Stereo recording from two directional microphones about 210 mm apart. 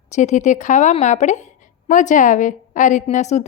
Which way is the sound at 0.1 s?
35° left (ahead or behind).